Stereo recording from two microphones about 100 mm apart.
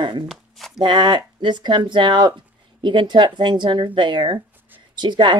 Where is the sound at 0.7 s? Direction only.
50° right (ahead or behind).